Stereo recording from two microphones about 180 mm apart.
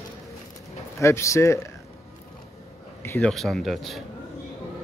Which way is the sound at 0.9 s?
15° left (ahead or behind).